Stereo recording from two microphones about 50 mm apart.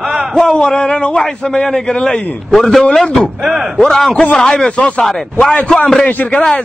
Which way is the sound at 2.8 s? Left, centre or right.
Centre.